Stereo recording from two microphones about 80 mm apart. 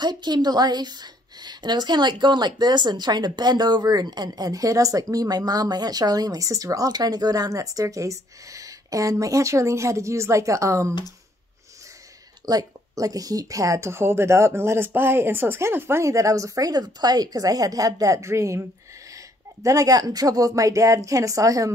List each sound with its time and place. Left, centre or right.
0.0 s speech: right
12.4 s speech: right